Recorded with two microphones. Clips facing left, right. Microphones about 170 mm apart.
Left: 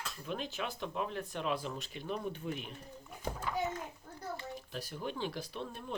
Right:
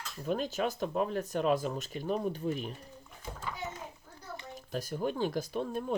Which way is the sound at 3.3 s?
50° left (ahead or behind).